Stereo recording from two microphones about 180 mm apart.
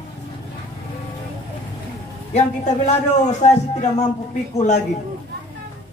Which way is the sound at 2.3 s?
40° left (ahead or behind).